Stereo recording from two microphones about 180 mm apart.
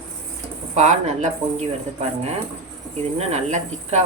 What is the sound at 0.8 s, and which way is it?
Speech, 40° right (ahead or behind).